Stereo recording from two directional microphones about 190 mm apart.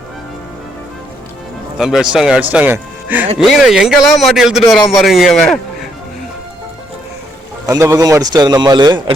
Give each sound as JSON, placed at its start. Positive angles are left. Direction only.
{"t": 1.8, "sound": "a man's voice", "side_deg": 0}
{"t": 7.7, "sound": "a man's voice", "side_deg": -15}